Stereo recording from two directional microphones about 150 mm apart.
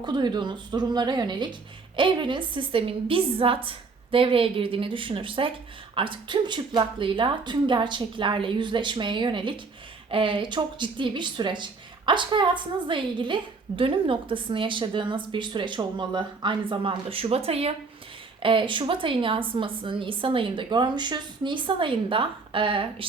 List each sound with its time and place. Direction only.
0.0 s speech: 30° right (ahead or behind)